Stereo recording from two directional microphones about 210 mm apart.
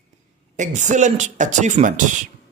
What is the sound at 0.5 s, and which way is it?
Speech, 35° right (ahead or behind).